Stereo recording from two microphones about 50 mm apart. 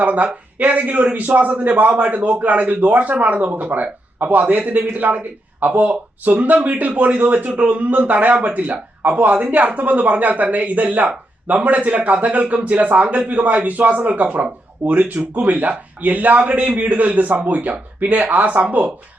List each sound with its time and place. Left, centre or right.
0.0 s a man's voice: right